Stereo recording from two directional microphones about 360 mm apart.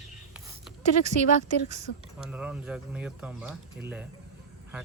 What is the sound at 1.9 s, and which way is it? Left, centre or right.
Speech, left.